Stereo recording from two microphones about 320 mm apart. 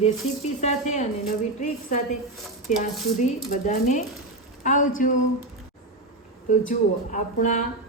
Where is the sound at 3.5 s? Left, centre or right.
Left.